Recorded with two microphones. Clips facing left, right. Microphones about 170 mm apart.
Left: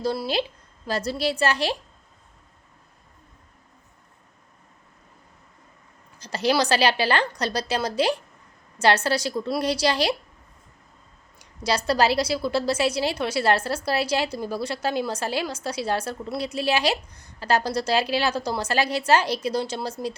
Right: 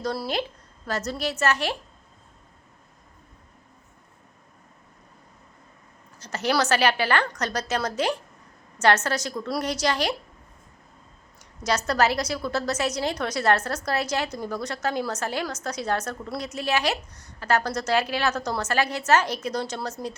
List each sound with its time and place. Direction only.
0.0 s a woman's voice: 25° left (ahead or behind)
6.2 s speech: 30° left (ahead or behind)
11.3 s a woman's voice: 30° left (ahead or behind)